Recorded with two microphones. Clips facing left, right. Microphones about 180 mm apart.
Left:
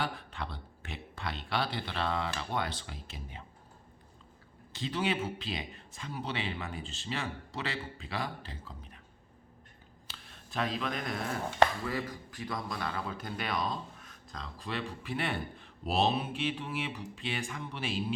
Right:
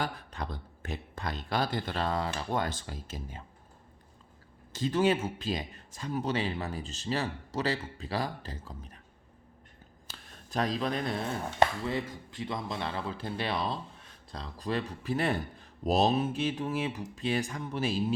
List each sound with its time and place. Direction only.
0.0 s a sound: 45° right (ahead or behind)
2.5 s speech: 45° right (ahead or behind)
4.7 s a man's voice: 45° right (ahead or behind)
10.1 s a man's voice: 40° right (ahead or behind)